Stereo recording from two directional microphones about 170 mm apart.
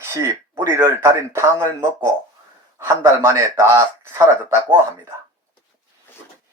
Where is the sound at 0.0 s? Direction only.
15° right (ahead or behind).